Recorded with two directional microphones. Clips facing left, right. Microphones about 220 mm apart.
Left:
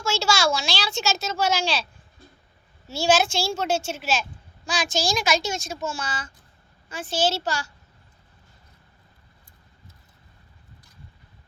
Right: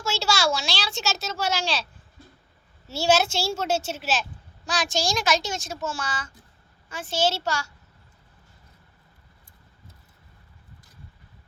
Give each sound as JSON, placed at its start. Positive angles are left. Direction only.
{"t": 0.0, "sound": "a child's voice", "side_deg": 0}
{"t": 2.8, "sound": "a child's voice", "side_deg": -5}
{"t": 7.1, "sound": "a child's voice", "side_deg": 35}